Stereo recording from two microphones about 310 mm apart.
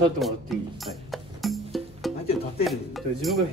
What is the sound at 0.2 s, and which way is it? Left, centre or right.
Speech, centre.